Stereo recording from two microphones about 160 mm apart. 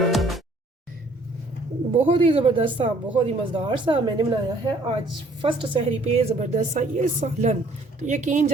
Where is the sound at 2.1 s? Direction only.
35° right (ahead or behind).